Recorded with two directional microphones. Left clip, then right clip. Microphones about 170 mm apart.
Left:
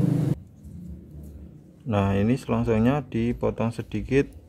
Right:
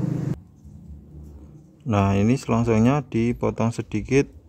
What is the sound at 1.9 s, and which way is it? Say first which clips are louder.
Speech: right 3 dB; 15° right (ahead or behind).